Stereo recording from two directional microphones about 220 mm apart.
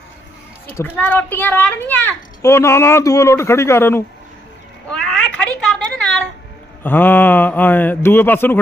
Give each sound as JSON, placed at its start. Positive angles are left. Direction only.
{"t": 0.8, "sound": "a child's voice", "side_deg": 10}
{"t": 4.9, "sound": "a sound", "side_deg": 5}
{"t": 6.8, "sound": "a child's voice", "side_deg": 10}